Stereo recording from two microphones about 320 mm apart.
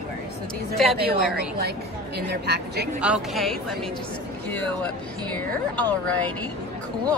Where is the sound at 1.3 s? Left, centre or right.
Right.